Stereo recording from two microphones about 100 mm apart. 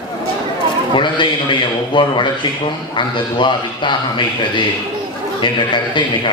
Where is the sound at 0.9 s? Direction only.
55° left (ahead or behind).